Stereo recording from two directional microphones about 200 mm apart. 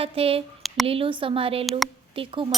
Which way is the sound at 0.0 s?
30° right (ahead or behind).